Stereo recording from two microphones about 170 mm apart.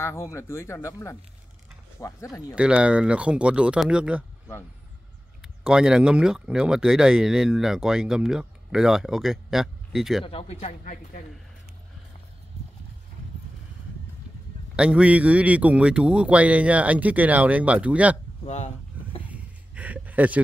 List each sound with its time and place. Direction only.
0.0 s speech: 15° left (ahead or behind)
2.5 s speech: 5° right (ahead or behind)
5.4 s speech: 5° right (ahead or behind)
10.2 s speech: 35° left (ahead or behind)
14.8 s speech: 5° right (ahead or behind)
18.4 s speech: 40° left (ahead or behind)
19.2 s a sound: 10° right (ahead or behind)